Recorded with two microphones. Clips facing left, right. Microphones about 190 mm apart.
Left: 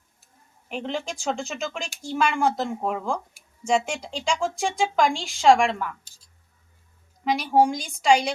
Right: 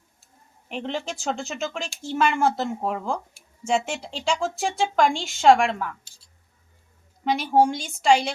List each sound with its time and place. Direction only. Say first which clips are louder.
0.7 s speech: even; centre (ahead or behind)
7.3 s speech: even; centre (ahead or behind)